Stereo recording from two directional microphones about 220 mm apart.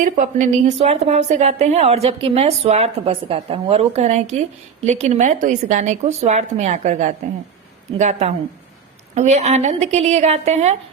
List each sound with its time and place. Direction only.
0.0 s a woman's voice: 35° right (ahead or behind)